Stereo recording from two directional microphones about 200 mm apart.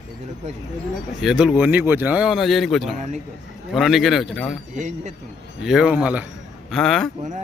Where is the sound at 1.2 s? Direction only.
5° right (ahead or behind).